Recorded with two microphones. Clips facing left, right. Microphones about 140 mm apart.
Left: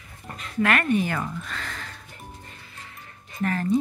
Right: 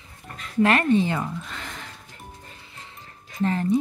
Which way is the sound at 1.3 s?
20° right (ahead or behind).